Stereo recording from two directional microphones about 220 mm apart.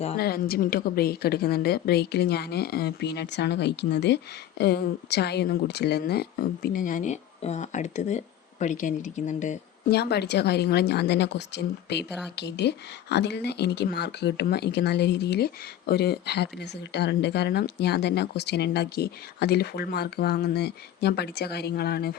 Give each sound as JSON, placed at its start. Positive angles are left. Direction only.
{"t": 0.2, "sound": "speech", "side_deg": 45}
{"t": 9.9, "sound": "speech", "side_deg": 45}